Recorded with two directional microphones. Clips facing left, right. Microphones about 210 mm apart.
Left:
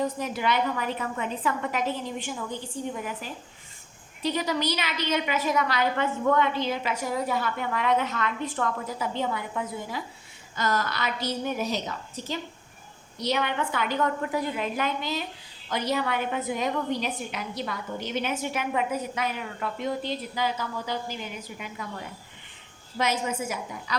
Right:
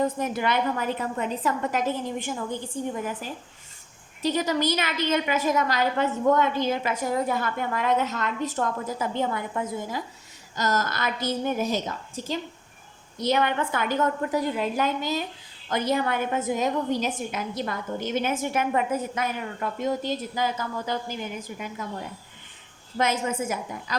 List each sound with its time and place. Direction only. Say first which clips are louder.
0.0 s a woman's voice: right 2 dB; 50° right (ahead or behind)
4.2 s a woman's voice: right 3 dB; 45° right (ahead or behind)
23.0 s a woman's voice: right 2 dB; 50° right (ahead or behind)